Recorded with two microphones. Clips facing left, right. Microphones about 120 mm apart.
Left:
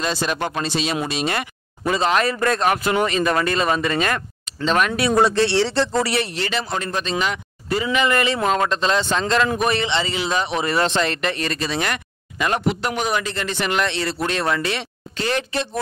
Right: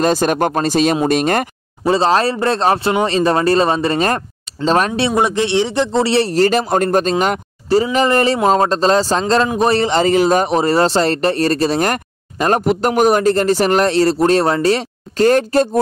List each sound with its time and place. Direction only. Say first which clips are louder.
0.0 s speech: right 9 dB; 45° right (ahead or behind)
1.9 s speech: right 5 dB; 30° right (ahead or behind)
5.1 s speech: even; 20° right (ahead or behind); by 15.8 s 45° right (ahead or behind)